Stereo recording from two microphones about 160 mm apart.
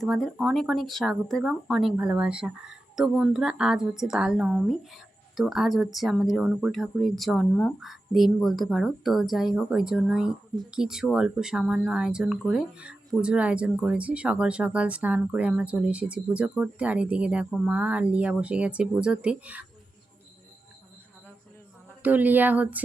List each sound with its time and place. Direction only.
0.0 s speech: centre (ahead or behind)
22.0 s speech: 10° right (ahead or behind)